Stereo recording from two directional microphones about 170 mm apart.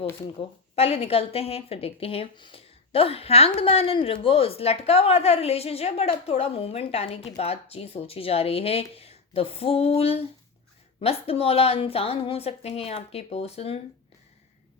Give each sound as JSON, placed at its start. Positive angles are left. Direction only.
{"t": 0.3, "sound": "a woman's voice", "side_deg": 35}